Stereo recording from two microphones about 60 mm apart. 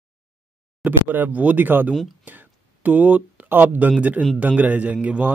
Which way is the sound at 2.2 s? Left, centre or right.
Right.